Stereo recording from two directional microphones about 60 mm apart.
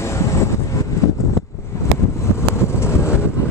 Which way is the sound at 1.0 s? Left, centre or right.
Left.